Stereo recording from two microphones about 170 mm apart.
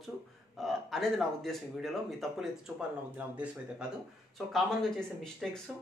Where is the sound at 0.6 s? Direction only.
Centre (ahead or behind).